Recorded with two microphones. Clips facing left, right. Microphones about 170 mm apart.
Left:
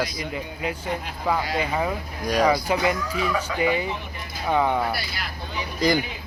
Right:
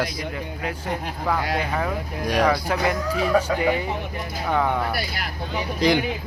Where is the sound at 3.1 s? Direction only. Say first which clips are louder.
Right 5 dB; 35° right (ahead or behind).